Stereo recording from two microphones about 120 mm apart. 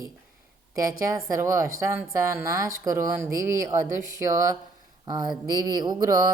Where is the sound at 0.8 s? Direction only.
30° right (ahead or behind).